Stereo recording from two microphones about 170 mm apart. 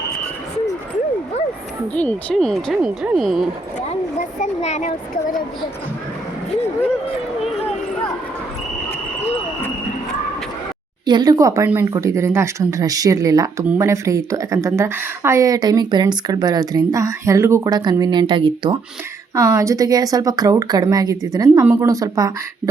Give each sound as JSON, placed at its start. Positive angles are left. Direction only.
{"t": 2.0, "sound": "speech", "side_deg": 5}
{"t": 4.4, "sound": "a child's voice", "side_deg": 45}
{"t": 11.0, "sound": "speech", "side_deg": -25}